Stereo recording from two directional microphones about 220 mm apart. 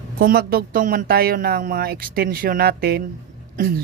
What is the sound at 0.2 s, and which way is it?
Speech, 45° right (ahead or behind).